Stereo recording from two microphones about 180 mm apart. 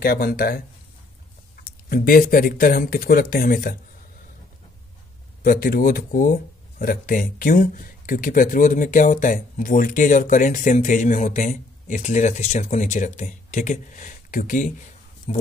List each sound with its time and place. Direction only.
0.0 s speech: 55° left (ahead or behind)
1.6 s speech: 55° left (ahead or behind)
5.4 s speech: 55° left (ahead or behind)
15.3 s speech: 30° left (ahead or behind)